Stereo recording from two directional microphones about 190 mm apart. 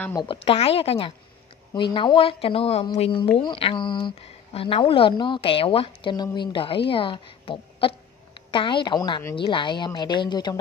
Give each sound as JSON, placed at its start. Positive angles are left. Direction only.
{"t": 0.2, "sound": "a woman's voice", "side_deg": 30}